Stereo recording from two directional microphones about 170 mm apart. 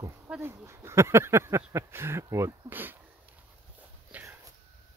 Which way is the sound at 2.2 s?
15° right (ahead or behind).